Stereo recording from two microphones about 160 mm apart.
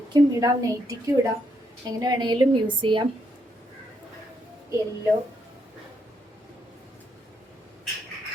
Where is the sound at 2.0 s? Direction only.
25° right (ahead or behind).